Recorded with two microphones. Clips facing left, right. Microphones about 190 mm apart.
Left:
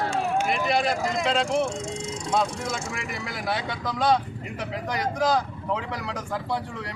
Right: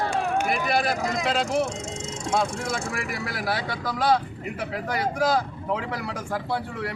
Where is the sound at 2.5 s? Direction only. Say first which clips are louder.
Right 2 dB; 55° right (ahead or behind).